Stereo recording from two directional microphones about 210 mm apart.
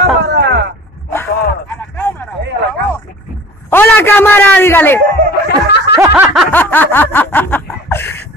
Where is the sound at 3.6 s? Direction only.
10° left (ahead or behind).